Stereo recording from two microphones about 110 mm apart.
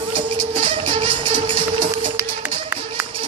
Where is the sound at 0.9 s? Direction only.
60° right (ahead or behind).